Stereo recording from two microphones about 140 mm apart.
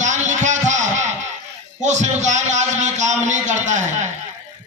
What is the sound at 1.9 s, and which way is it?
A man's voice, 55° right (ahead or behind).